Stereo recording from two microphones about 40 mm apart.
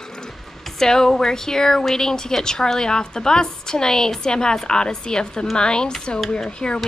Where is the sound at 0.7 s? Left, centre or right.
Centre.